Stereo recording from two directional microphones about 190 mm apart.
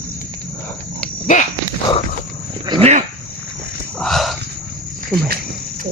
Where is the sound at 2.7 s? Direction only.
30° right (ahead or behind).